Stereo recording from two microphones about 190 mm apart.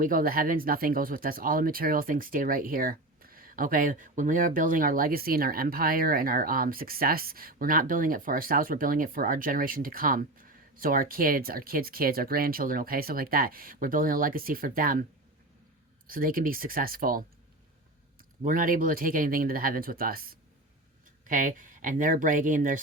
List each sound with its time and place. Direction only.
0.0 s speech: 45° right (ahead or behind)
16.0 s speech: 50° right (ahead or behind)
18.4 s speech: 45° right (ahead or behind)